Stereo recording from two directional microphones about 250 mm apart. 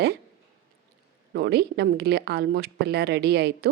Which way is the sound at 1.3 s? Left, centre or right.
Right.